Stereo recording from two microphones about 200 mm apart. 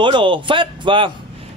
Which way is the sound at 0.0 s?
25° right (ahead or behind).